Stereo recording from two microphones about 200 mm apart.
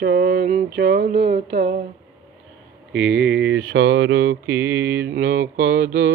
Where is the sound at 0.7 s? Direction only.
50° right (ahead or behind).